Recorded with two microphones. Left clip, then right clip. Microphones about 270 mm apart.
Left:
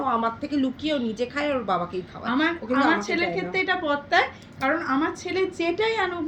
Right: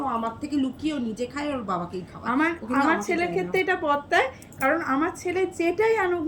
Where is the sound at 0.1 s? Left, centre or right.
Centre.